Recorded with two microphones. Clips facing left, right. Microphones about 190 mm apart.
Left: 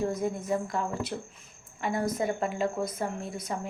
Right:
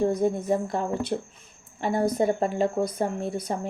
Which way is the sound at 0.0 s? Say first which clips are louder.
Right 6 dB; 30° right (ahead or behind).